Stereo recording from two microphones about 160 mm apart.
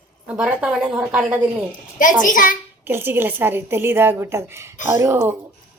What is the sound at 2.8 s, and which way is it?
A woman's voice, 15° right (ahead or behind).